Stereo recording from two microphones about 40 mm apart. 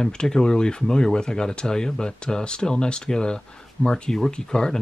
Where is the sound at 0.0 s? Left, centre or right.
Centre.